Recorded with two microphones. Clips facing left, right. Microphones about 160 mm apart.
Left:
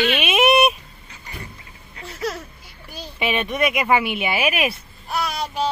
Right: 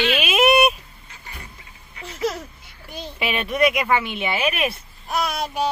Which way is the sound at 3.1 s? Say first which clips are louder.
Even; centre (ahead or behind).